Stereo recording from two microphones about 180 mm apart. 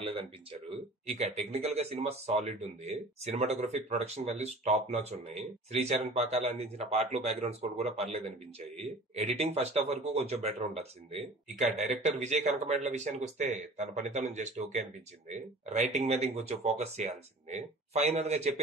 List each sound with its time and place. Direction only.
0.0 s speech: 30° right (ahead or behind)